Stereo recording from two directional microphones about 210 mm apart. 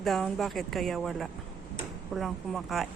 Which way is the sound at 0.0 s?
Centre (ahead or behind).